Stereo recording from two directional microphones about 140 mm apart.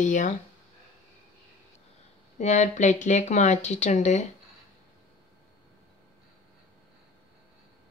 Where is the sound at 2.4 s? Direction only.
60° left (ahead or behind).